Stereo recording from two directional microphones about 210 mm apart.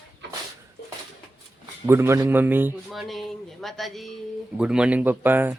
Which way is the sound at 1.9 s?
10° right (ahead or behind).